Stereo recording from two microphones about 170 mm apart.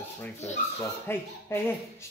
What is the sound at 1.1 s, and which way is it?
Speech, 15° left (ahead or behind).